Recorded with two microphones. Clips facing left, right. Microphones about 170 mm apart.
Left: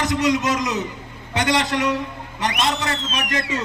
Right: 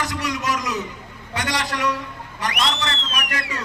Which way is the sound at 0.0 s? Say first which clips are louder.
Left 6 dB; 20° left (ahead or behind).